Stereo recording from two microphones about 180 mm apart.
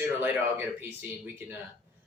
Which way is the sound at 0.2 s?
10° right (ahead or behind).